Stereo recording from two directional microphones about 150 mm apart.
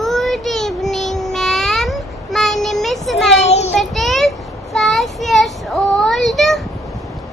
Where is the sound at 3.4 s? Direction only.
45° left (ahead or behind).